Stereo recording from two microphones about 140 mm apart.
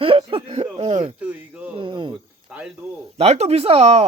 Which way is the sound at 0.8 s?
60° right (ahead or behind).